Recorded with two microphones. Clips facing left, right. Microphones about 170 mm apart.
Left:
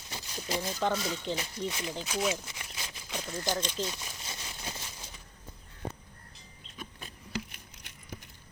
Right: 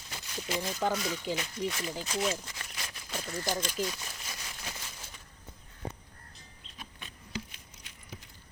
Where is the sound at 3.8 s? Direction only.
25° left (ahead or behind).